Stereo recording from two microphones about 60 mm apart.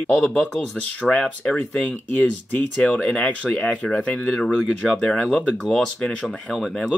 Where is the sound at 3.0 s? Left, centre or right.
Centre.